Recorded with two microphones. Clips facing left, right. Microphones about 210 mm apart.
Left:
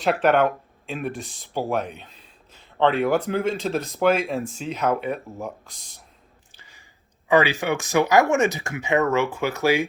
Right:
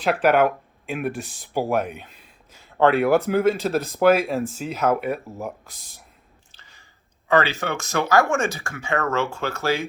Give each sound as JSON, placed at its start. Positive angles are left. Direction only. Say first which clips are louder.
{"t": 0.0, "sound": "speech", "louder": "right 1 dB", "side_deg": 0}
{"t": 6.5, "sound": "chewing", "louder": "left 1 dB", "side_deg": 15}
{"t": 7.3, "sound": "speech", "louder": "left 2 dB", "side_deg": 10}